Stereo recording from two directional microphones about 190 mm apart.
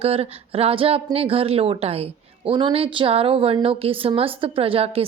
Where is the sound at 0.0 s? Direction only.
30° right (ahead or behind).